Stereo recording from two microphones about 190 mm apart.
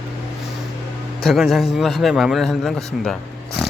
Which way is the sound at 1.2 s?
Centre (ahead or behind).